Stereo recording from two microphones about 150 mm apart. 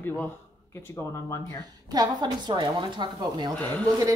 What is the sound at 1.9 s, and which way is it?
Speech, 25° right (ahead or behind).